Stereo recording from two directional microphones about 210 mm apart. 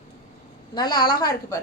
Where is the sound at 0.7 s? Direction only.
20° left (ahead or behind).